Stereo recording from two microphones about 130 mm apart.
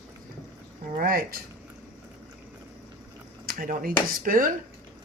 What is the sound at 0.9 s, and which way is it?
Speech, 90° right.